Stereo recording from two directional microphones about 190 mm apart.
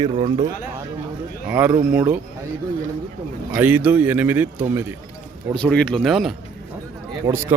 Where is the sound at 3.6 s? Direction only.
10° right (ahead or behind).